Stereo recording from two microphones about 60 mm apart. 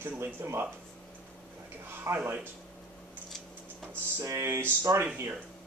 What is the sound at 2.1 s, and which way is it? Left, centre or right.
Speech, right.